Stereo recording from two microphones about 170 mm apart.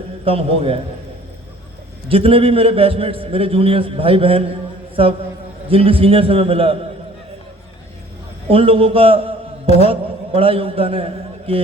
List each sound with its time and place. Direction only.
0.3 s a man's voice: 35° right (ahead or behind)
2.0 s a man's voice: 35° right (ahead or behind)
5.6 s a man's voice: 35° right (ahead or behind)
8.4 s a man's voice: 35° right (ahead or behind)